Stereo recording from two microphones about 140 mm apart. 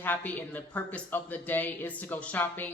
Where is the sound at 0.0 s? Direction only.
10° left (ahead or behind).